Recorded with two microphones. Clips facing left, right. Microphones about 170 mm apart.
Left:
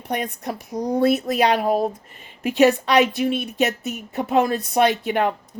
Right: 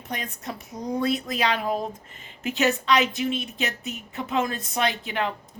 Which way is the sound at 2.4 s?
60° left (ahead or behind).